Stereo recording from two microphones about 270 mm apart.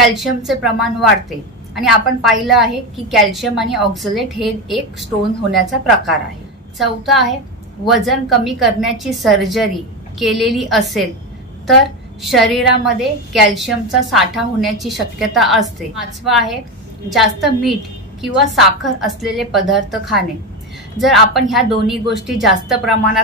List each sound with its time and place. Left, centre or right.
0.0 s a woman's voice: centre
12.2 s a woman's voice: centre